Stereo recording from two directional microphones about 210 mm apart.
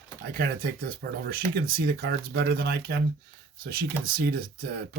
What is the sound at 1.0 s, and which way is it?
Speech, 50° right (ahead or behind).